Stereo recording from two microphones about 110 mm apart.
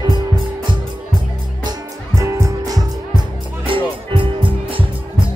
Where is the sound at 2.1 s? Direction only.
25° right (ahead or behind).